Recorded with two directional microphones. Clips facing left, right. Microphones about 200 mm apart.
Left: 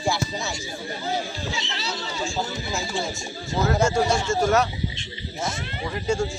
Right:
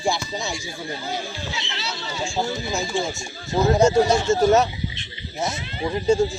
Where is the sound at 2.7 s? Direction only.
20° right (ahead or behind).